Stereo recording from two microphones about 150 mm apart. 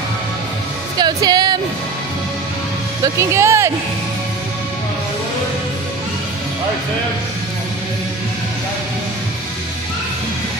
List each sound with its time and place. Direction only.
0.9 s music: 25° right (ahead or behind)
3.0 s speech: 20° right (ahead or behind)